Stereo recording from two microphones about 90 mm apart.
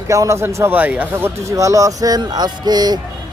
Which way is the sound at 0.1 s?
35° right (ahead or behind).